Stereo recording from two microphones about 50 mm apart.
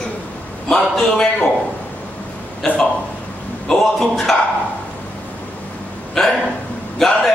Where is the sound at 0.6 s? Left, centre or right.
Centre.